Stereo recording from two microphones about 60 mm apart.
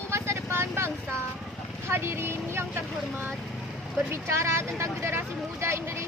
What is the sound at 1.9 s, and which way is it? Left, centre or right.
Vehicle, right.